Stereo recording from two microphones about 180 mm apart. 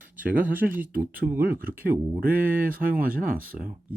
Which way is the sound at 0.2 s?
10° right (ahead or behind).